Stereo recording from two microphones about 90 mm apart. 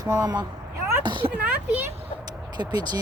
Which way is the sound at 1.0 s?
65° right (ahead or behind).